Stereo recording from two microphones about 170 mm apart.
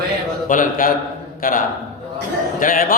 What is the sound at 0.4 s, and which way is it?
A man's voice, 50° left (ahead or behind).